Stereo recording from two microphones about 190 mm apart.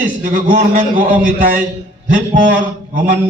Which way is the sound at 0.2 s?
45° right (ahead or behind).